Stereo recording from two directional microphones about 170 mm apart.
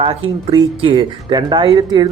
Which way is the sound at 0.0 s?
35° right (ahead or behind).